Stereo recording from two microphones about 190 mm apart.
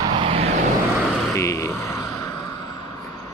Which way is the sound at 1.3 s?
15° left (ahead or behind).